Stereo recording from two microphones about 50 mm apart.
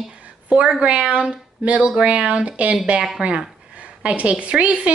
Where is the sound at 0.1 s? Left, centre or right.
Right.